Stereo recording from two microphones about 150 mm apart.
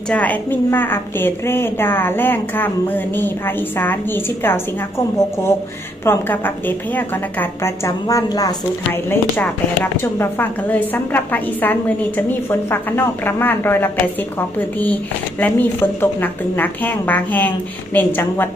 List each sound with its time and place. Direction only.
0.1 s a woman's voice: 10° left (ahead or behind)
8.9 s a woman's voice: 15° left (ahead or behind)
15.4 s a woman's voice: 10° left (ahead or behind)